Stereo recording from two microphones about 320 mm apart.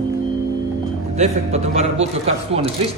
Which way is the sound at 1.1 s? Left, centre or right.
Right.